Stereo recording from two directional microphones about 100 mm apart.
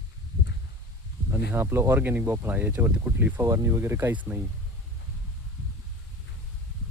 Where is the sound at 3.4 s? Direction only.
30° right (ahead or behind).